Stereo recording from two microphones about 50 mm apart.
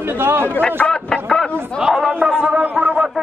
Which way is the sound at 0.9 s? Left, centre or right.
Centre.